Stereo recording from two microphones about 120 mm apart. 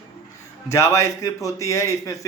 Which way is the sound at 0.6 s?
25° left (ahead or behind).